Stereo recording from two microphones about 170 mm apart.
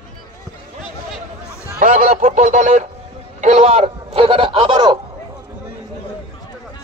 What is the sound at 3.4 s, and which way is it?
A man's voice, 40° right (ahead or behind).